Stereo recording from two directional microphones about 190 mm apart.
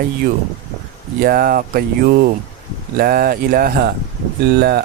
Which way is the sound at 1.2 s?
50° right (ahead or behind).